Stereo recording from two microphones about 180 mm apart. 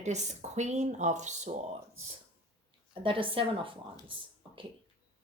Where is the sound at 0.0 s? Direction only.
40° right (ahead or behind).